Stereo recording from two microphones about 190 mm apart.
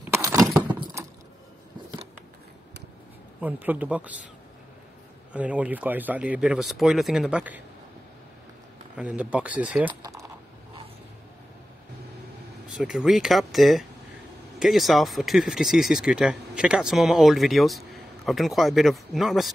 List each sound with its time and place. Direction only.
0.1 s keys jangling: 15° right (ahead or behind)
3.3 s speech: 10° right (ahead or behind)
5.3 s speech: 5° right (ahead or behind)
8.9 s speech: 5° right (ahead or behind)
12.7 s speech: 5° right (ahead or behind)